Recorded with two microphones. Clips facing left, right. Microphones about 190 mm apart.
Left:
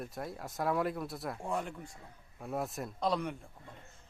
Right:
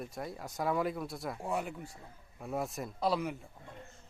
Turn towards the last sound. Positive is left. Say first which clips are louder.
# right 1 dB
turn(degrees=-5)  # may be behind; listen again after turning